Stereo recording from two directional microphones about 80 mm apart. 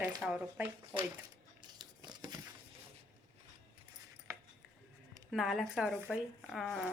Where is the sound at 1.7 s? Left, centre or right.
Right.